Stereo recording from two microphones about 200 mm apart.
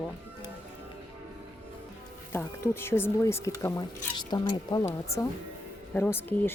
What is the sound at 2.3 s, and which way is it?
Speech, 10° left (ahead or behind).